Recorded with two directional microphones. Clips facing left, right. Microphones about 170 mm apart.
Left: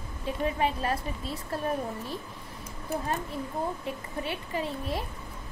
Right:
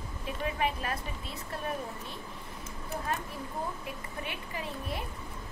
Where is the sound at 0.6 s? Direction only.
30° left (ahead or behind).